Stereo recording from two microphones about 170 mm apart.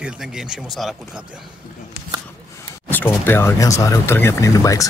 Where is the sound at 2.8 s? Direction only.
10° left (ahead or behind).